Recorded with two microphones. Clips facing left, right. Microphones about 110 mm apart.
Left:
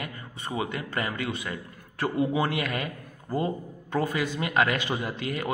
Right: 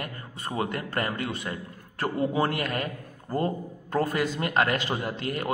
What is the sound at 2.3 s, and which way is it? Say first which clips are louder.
A man's voice: right 1 dB; 40° right (ahead or behind).